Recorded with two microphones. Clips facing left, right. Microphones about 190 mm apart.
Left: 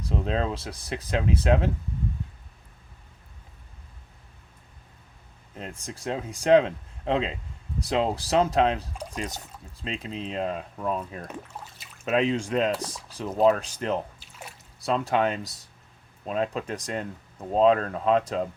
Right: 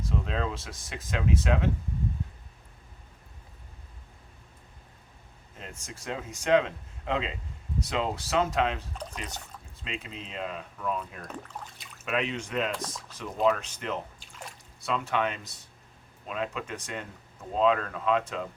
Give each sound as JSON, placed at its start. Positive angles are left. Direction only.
{"t": 0.0, "sound": "speech", "side_deg": 35}
{"t": 5.5, "sound": "speech", "side_deg": 35}